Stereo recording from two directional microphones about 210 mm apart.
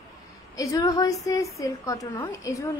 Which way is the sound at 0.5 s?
15° left (ahead or behind).